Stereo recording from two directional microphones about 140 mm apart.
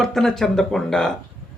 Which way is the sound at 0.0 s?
5° left (ahead or behind).